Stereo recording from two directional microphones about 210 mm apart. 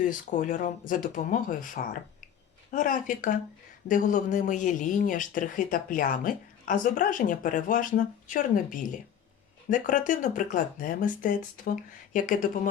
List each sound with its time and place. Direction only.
0.0 s speech: 40° left (ahead or behind)